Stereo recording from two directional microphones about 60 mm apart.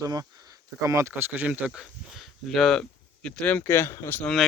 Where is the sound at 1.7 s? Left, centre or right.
Centre.